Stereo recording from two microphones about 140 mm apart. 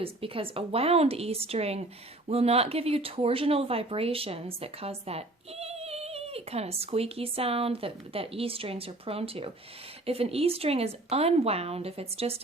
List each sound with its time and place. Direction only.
0.0 s speech: 40° right (ahead or behind)